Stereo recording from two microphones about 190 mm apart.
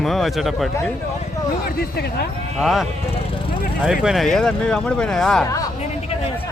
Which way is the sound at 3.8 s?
Centre (ahead or behind).